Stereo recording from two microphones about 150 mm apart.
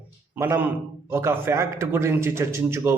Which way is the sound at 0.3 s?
20° right (ahead or behind).